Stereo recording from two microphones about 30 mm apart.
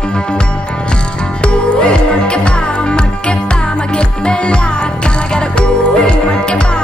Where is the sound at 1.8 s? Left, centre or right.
Left.